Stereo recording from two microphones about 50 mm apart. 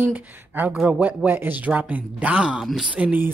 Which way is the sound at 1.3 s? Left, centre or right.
Right.